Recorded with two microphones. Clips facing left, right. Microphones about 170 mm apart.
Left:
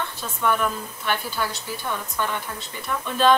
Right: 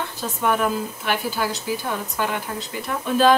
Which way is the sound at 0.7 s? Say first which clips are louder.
Right 3 dB; 10° right (ahead or behind).